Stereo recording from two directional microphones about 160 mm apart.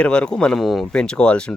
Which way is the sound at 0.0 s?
5° left (ahead or behind).